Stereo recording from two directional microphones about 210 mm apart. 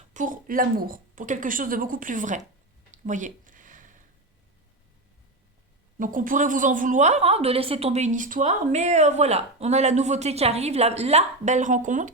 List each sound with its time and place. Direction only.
0.1 s a woman's voice: 40° right (ahead or behind)
2.9 s a sound: 35° right (ahead or behind)
6.0 s a woman's voice: 40° right (ahead or behind)